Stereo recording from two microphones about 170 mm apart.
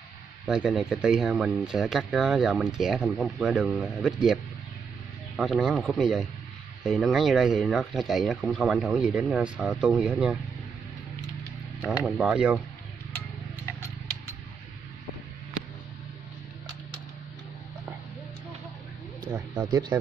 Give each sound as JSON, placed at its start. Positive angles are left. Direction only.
{"t": 0.5, "sound": "speech", "side_deg": -5}
{"t": 11.8, "sound": "speech", "side_deg": 5}
{"t": 19.3, "sound": "a sound", "side_deg": -10}
{"t": 19.7, "sound": "speech", "side_deg": -25}